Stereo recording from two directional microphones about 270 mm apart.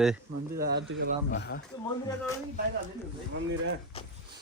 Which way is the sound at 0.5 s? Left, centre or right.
Right.